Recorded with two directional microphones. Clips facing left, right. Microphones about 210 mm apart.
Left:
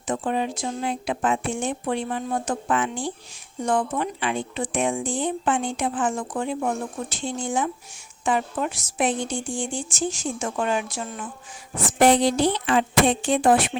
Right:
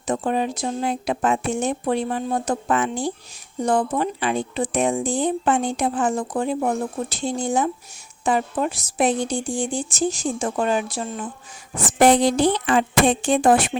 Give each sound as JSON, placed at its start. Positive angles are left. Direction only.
{"t": 0.1, "sound": "speech", "side_deg": -40}
{"t": 11.9, "sound": "speech", "side_deg": -50}